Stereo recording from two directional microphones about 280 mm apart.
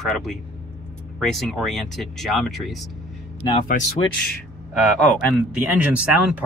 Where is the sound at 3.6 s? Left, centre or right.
Left.